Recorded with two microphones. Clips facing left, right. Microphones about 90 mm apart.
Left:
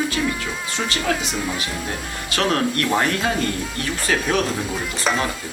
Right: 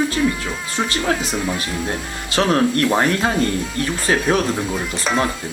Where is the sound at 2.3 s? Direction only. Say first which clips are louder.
Right 4 dB; 30° right (ahead or behind).